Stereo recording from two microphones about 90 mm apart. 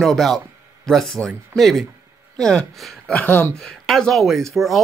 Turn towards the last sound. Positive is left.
turn(degrees=0)  # may be behind; listen again after turning